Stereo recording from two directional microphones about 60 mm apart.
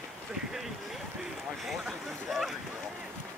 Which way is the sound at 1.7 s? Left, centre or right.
Centre.